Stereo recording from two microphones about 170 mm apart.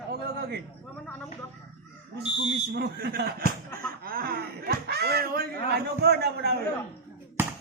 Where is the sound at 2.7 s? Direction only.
70° right (ahead or behind).